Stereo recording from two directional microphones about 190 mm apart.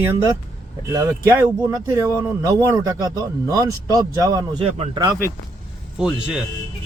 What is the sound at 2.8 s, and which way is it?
Speech, 20° right (ahead or behind).